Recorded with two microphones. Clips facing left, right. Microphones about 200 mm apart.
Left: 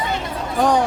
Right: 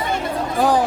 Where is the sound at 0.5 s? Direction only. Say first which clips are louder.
Even; 5° right (ahead or behind).